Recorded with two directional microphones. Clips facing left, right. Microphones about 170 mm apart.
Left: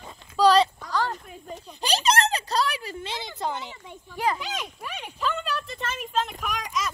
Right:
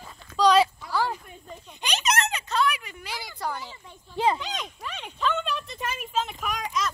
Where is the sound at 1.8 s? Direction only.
35° left (ahead or behind).